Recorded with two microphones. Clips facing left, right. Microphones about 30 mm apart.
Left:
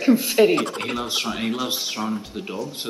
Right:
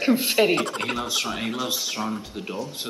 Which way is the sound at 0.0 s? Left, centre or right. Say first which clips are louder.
Left 3 dB; centre.